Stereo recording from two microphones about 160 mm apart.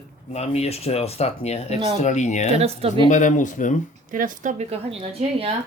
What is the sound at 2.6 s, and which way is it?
Speech, 40° right (ahead or behind).